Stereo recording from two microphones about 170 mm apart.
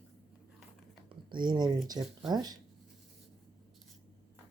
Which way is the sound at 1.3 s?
25° right (ahead or behind).